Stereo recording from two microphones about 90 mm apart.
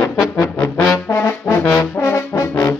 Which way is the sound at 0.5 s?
15° left (ahead or behind).